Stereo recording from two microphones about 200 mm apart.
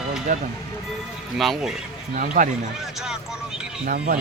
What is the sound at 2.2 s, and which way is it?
Speech, 40° right (ahead or behind).